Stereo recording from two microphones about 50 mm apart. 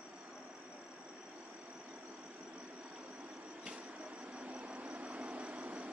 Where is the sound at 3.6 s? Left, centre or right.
Right.